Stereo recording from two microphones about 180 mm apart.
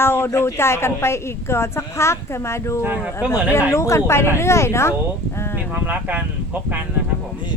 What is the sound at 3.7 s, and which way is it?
A woman's voice, 15° left (ahead or behind).